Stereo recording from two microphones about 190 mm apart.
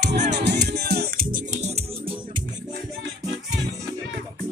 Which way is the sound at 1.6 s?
35° right (ahead or behind).